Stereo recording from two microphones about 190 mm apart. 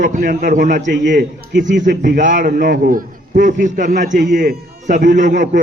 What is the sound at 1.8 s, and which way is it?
A man's voice, 45° right (ahead or behind).